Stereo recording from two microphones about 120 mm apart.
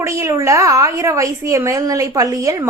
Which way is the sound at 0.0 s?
25° right (ahead or behind).